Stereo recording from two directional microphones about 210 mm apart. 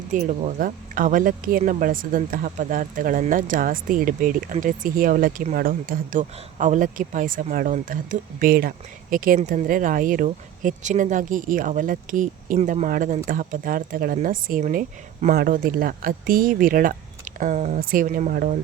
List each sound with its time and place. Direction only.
0.1 s speech: 35° right (ahead or behind)